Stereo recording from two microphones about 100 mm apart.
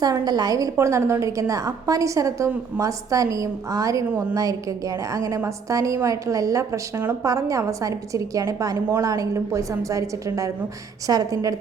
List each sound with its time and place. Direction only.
0.0 s a woman's voice: 40° right (ahead or behind)